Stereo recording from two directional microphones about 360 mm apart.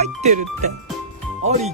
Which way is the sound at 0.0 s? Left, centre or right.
Centre.